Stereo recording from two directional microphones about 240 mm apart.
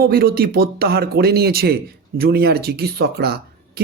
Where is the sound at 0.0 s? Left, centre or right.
Right.